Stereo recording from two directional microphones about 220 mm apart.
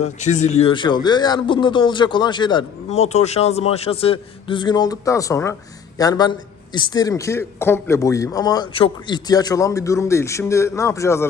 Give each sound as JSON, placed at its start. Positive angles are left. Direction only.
{"t": 0.0, "sound": "a man's voice", "side_deg": 30}